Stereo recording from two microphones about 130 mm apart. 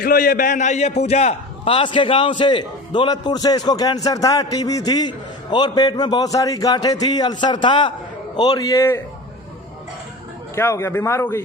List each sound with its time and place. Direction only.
0.1 s a man's voice: 90° left; by 9.0 s 25° left (ahead or behind)
10.5 s a man's voice: 20° left (ahead or behind)